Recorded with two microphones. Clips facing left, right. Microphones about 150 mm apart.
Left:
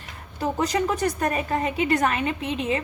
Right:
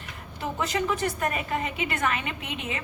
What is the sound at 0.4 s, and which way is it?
A woman's voice, 40° left (ahead or behind).